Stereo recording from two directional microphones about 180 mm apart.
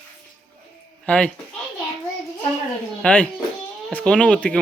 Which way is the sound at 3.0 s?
5° left (ahead or behind).